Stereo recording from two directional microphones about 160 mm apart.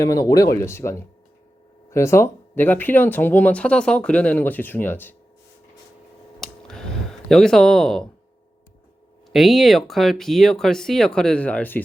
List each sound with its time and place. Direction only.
0.0 s speech: 20° left (ahead or behind)
6.4 s a sound: 5° left (ahead or behind)
9.3 s speech: centre (ahead or behind)